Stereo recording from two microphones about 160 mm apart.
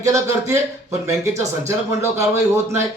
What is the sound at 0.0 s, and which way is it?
Speech, 20° right (ahead or behind).